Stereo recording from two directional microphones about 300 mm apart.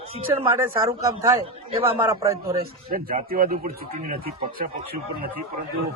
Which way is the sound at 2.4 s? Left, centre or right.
Right.